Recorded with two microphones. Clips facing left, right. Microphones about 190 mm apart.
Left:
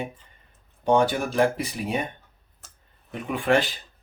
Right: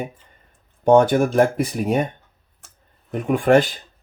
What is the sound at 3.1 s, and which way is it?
Speech, 45° right (ahead or behind).